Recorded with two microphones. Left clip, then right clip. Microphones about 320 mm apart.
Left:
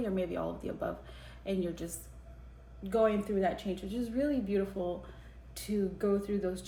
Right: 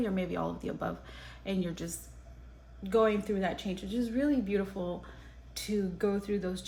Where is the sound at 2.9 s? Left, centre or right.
Right.